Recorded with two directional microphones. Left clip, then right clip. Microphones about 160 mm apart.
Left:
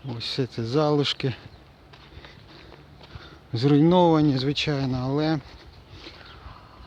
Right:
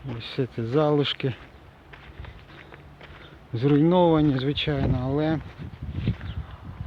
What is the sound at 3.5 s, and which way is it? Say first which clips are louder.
Speech: left 1 dB; 30° left (ahead or behind).